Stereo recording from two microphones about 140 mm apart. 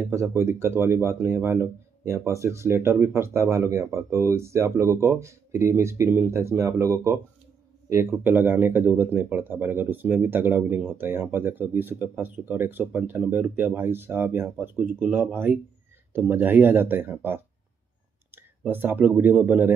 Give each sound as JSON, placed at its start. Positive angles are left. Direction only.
{"t": 0.0, "sound": "speech", "side_deg": -20}